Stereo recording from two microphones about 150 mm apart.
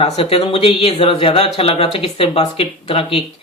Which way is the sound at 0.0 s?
40° left (ahead or behind).